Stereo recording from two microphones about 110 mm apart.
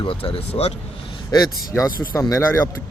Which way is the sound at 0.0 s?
55° left (ahead or behind).